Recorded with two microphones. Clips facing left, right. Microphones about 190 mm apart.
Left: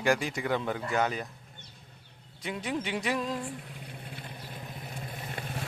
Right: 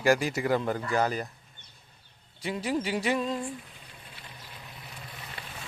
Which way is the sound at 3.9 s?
55° left (ahead or behind).